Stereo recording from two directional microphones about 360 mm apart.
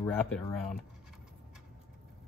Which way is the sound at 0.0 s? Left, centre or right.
Centre.